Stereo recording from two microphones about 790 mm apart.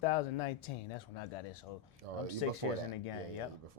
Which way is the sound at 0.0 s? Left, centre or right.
Left.